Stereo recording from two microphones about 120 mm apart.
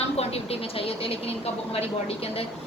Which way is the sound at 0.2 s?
55° left (ahead or behind).